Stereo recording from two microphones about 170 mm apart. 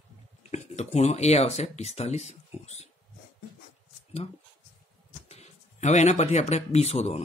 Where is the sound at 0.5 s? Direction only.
40° left (ahead or behind).